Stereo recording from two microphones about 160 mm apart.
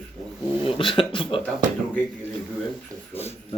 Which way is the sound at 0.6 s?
35° left (ahead or behind).